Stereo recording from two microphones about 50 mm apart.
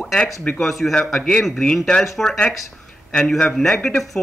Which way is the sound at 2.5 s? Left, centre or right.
Centre.